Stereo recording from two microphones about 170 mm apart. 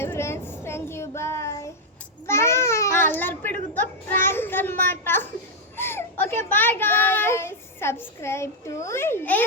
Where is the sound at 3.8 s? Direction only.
10° left (ahead or behind).